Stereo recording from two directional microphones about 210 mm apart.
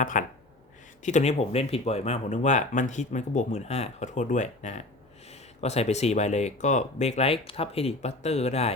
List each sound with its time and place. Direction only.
0.0 s speech: 40° left (ahead or behind)